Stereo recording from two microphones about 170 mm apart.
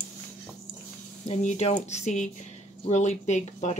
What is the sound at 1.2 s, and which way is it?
Speech, 40° left (ahead or behind).